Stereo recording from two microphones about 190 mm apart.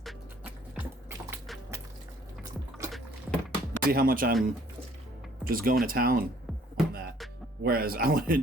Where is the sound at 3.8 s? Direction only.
50° right (ahead or behind).